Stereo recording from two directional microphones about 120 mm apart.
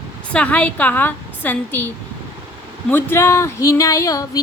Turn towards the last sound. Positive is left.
turn(degrees=30)  # may be behind; listen again after turning